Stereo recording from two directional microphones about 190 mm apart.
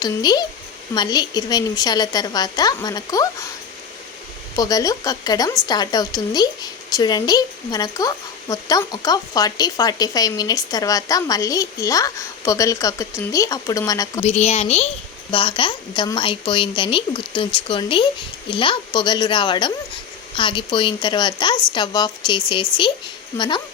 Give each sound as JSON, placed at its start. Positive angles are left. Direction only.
{"t": 0.0, "sound": "a woman's voice", "side_deg": 20}
{"t": 4.5, "sound": "a woman's voice", "side_deg": 20}
{"t": 14.3, "sound": "a woman's voice", "side_deg": 35}